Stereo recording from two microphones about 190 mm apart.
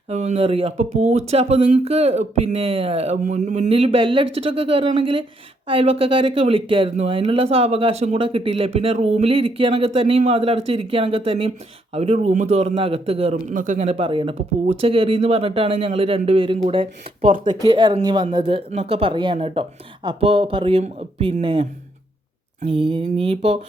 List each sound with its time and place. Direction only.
0.1 s speech: 35° right (ahead or behind)
13.5 s speech: 45° right (ahead or behind)